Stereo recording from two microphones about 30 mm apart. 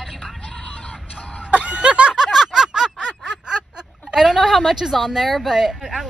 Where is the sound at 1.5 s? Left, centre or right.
Right.